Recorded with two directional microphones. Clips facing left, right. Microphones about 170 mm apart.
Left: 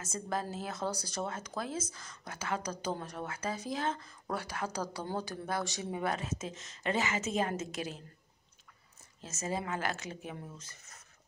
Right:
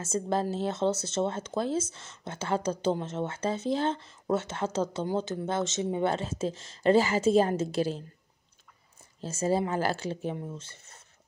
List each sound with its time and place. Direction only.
0.0 s speech: 30° right (ahead or behind)
9.2 s speech: 30° right (ahead or behind)